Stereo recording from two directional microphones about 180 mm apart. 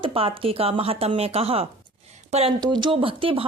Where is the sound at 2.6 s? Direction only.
25° right (ahead or behind).